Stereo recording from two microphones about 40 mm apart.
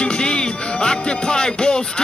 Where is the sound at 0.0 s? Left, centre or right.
Left.